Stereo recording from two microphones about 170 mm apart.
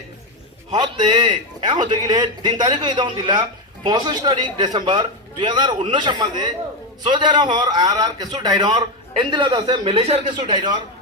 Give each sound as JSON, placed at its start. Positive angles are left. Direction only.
{"t": 0.7, "sound": "a man's voice", "side_deg": -25}